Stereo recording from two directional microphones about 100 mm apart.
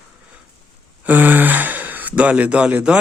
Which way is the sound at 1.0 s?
20° right (ahead or behind).